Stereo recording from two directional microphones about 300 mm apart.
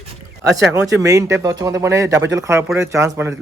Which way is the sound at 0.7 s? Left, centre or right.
Centre.